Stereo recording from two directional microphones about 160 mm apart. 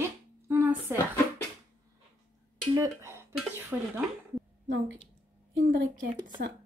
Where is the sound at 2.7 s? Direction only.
15° right (ahead or behind).